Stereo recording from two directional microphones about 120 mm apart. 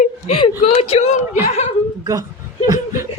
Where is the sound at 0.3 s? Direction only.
50° left (ahead or behind).